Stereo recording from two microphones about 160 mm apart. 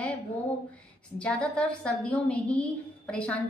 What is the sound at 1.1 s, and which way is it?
A woman's voice, 5° left (ahead or behind).